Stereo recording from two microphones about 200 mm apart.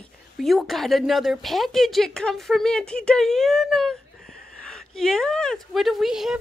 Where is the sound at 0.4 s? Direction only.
Centre (ahead or behind).